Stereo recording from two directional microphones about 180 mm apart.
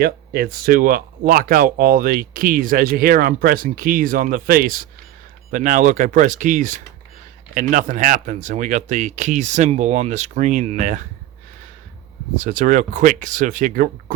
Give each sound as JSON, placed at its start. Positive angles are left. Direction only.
{"t": 0.0, "sound": "speech", "side_deg": -55}
{"t": 12.4, "sound": "speech", "side_deg": -45}